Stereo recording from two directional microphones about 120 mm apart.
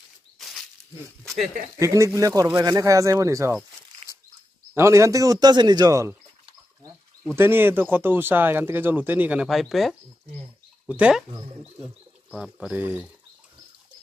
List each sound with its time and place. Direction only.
0.4 s a sound: centre (ahead or behind)
1.8 s a man's voice: 25° right (ahead or behind)
4.7 s a man's voice: 25° right (ahead or behind)
7.3 s speech: 20° right (ahead or behind)
12.3 s speech: 5° right (ahead or behind)